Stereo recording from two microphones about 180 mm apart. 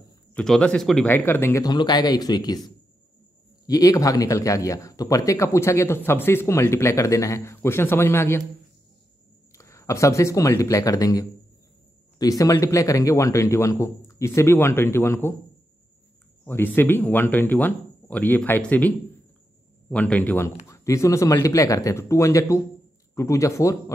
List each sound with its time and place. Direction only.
0.3 s speech: 5° left (ahead or behind); by 2.6 s 20° left (ahead or behind)
3.6 s speech: 20° left (ahead or behind)
9.5 s speech: 15° left (ahead or behind)
16.4 s speech: 10° left (ahead or behind)